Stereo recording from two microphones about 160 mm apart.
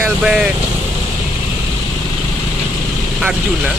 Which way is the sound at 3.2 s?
5° right (ahead or behind).